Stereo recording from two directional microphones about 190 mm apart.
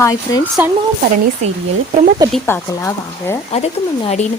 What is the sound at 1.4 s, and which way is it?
Speech, 35° right (ahead or behind).